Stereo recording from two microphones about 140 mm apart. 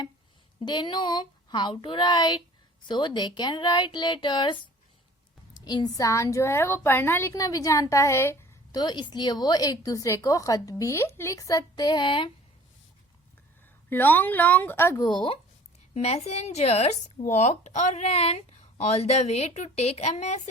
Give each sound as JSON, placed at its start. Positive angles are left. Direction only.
{"t": 0.6, "sound": "speech", "side_deg": 35}
{"t": 5.5, "sound": "speech", "side_deg": 30}
{"t": 8.7, "sound": "speech", "side_deg": 30}
{"t": 13.9, "sound": "speech", "side_deg": 15}
{"t": 15.1, "sound": "speech", "side_deg": 35}
{"t": 16.0, "sound": "speech", "side_deg": 50}